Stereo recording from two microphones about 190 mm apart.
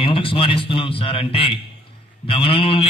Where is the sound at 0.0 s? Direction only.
30° left (ahead or behind).